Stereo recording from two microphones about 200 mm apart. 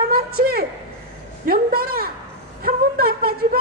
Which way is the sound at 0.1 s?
50° right (ahead or behind).